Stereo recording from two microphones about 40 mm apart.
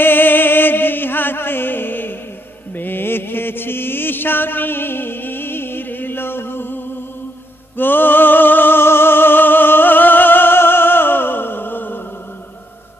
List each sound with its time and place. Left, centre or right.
0.0 s music: left
2.7 s mantra: left
7.7 s music: left